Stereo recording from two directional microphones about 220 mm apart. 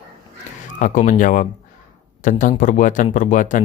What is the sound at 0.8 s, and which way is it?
Speech, 35° left (ahead or behind).